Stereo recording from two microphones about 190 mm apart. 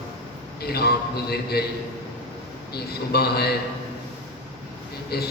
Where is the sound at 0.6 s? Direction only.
55° left (ahead or behind).